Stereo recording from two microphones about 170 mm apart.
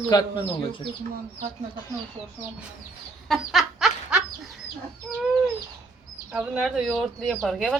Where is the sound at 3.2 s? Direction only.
Centre (ahead or behind).